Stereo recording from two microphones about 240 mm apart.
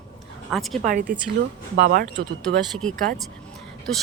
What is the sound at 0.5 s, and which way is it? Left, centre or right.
Speech, centre.